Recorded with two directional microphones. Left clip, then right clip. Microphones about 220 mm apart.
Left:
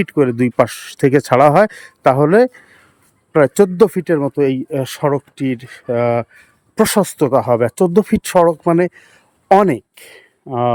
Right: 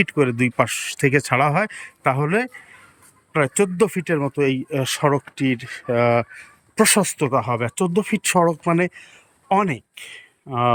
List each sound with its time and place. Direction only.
0.0 s speech: 15° left (ahead or behind)